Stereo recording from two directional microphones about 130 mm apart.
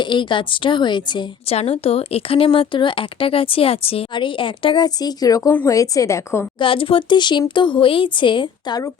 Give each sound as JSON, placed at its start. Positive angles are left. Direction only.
{"t": 0.0, "sound": "speech", "side_deg": 40}
{"t": 1.5, "sound": "a woman's voice", "side_deg": 50}
{"t": 6.6, "sound": "speech", "side_deg": 40}